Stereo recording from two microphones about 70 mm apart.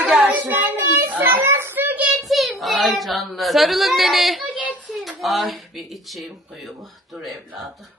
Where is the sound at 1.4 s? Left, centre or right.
Right.